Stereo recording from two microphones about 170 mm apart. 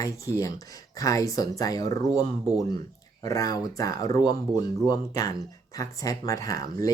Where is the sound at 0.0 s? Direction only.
20° left (ahead or behind).